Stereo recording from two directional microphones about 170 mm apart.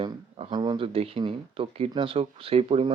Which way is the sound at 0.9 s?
35° right (ahead or behind).